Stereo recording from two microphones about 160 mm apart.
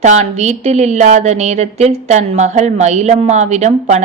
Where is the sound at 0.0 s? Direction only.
45° right (ahead or behind).